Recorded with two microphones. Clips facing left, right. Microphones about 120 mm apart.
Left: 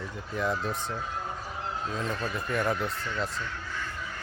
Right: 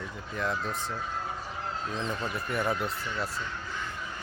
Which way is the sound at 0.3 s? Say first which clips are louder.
Left 2 dB; 5° left (ahead or behind).